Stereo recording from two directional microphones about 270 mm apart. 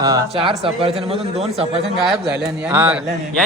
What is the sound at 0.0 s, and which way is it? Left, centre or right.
Speech, centre.